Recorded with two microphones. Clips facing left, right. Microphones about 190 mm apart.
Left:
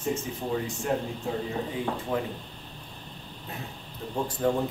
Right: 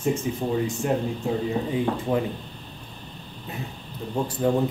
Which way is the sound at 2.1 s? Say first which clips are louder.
Right 5 dB; 15° right (ahead or behind).